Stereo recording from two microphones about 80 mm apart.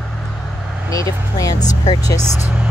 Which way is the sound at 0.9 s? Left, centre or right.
Left.